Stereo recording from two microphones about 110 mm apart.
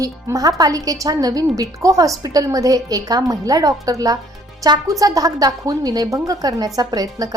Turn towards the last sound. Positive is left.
turn(degrees=-35)  # may be behind; listen again after turning